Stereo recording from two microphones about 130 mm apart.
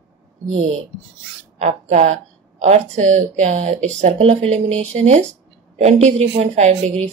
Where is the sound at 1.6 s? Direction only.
60° right (ahead or behind).